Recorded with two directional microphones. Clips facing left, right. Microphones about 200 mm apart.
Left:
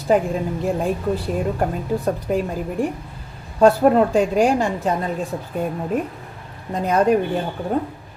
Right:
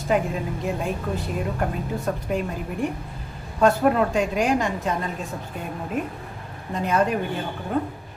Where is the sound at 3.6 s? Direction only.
35° left (ahead or behind).